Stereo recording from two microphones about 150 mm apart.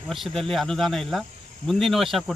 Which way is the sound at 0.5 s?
Centre (ahead or behind).